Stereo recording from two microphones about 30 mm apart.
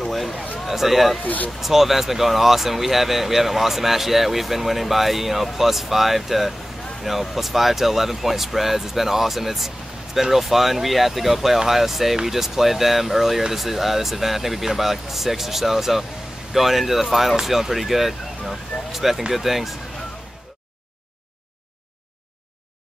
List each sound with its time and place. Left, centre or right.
0.0 s a sound: centre
0.7 s a man's voice: centre
1.2 s speech: left
1.6 s speech: centre